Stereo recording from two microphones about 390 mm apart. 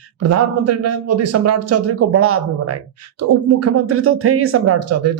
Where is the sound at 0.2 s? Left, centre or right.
Right.